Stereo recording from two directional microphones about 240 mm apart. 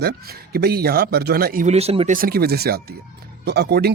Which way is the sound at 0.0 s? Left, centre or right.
Right.